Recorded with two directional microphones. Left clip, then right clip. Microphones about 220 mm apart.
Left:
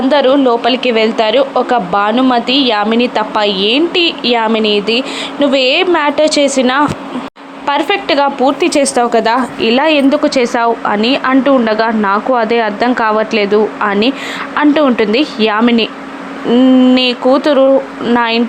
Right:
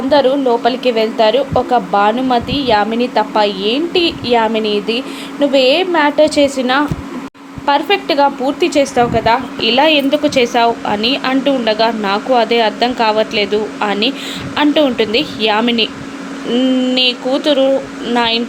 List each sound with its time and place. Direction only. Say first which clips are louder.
0.1 s a woman's voice: left 1 dB; 10° left (ahead or behind)